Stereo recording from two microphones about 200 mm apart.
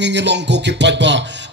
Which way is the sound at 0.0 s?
60° right (ahead or behind).